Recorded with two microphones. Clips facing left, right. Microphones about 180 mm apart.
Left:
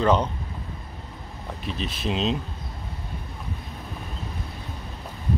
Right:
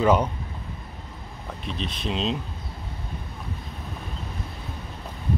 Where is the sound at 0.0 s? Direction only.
10° right (ahead or behind).